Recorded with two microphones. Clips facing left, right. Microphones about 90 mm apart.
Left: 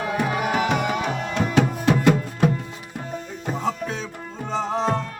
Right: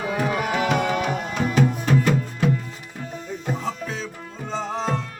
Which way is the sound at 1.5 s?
75° left (ahead or behind).